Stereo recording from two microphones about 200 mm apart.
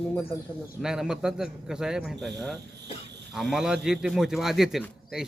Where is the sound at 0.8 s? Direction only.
5° right (ahead or behind).